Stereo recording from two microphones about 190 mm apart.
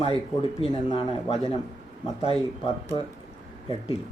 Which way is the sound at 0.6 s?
30° left (ahead or behind).